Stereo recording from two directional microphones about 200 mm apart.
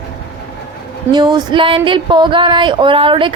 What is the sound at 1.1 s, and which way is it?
Speech, 20° right (ahead or behind).